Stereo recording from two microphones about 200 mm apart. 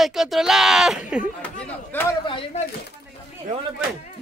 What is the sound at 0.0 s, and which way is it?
Speech, centre (ahead or behind).